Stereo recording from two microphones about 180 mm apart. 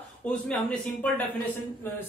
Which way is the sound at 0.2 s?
5° left (ahead or behind).